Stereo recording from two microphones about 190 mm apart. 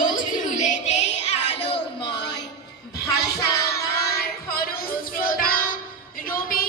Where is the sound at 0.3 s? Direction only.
40° left (ahead or behind).